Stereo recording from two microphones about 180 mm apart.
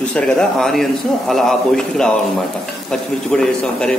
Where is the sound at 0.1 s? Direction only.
5° left (ahead or behind).